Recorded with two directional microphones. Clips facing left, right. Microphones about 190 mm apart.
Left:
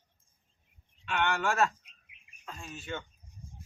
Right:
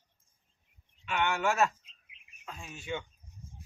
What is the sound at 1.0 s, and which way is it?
Speech, 5° right (ahead or behind).